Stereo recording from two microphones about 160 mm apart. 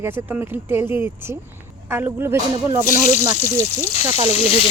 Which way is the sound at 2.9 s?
55° left (ahead or behind).